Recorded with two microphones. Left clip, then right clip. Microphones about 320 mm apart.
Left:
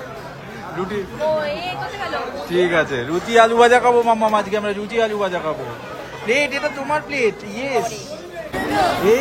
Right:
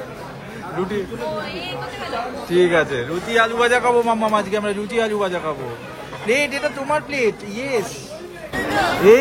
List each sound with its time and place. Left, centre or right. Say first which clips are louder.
0.7 s a man's voice: right 1 dB; centre
1.2 s speech: left 6 dB; left
2.5 s a man's voice: right 1 dB; centre
8.9 s a man's voice: right 8 dB; centre